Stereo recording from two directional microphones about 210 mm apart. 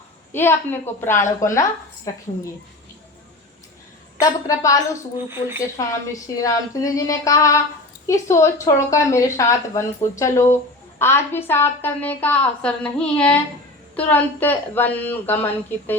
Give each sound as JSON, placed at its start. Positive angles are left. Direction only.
{"t": 0.3, "sound": "a woman's voice", "side_deg": 10}
{"t": 4.2, "sound": "a woman's voice", "side_deg": 15}
{"t": 5.8, "sound": "a woman's voice", "side_deg": 15}